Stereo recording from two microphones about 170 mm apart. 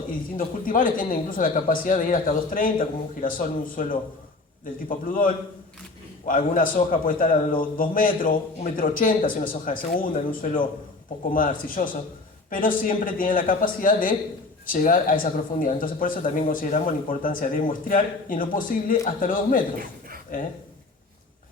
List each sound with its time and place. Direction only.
0.3 s a man's voice: 55° left (ahead or behind)